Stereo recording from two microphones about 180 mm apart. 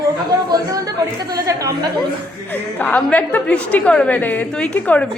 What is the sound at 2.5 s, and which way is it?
A woman's voice, 10° left (ahead or behind).